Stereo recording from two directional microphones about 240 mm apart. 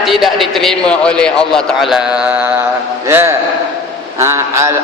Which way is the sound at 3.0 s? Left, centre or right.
Centre.